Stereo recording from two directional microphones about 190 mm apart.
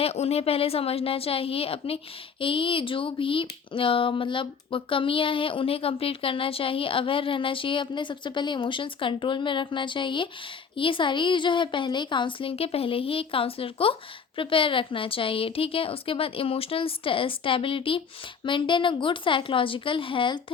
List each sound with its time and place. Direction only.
0.0 s a woman's voice: 30° left (ahead or behind)